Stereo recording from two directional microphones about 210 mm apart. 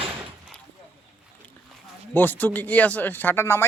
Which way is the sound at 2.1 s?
10° left (ahead or behind).